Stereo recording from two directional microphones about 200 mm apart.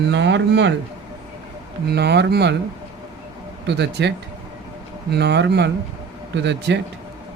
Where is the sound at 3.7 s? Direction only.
60° right (ahead or behind).